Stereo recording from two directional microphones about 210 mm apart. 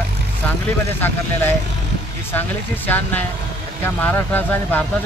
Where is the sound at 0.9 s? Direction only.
10° left (ahead or behind).